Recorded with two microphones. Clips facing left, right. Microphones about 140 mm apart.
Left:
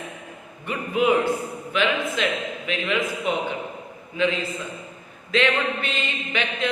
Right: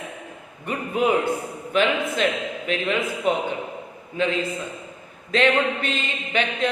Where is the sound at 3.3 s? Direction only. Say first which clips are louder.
Right 4 dB; 40° right (ahead or behind).